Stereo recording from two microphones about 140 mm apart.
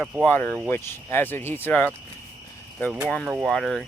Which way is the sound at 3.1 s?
Centre (ahead or behind).